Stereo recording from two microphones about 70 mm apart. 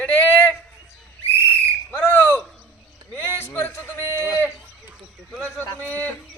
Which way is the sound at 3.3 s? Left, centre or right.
Left.